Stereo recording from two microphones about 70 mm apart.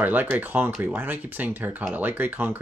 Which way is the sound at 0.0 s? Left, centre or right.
Right.